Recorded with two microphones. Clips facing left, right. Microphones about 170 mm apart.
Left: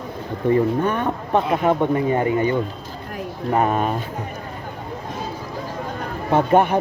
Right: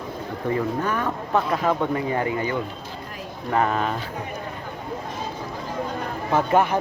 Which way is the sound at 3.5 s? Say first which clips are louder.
Left 3 dB; 15° left (ahead or behind).